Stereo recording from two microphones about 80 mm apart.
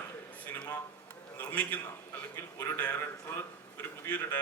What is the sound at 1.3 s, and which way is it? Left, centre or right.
Speech, left.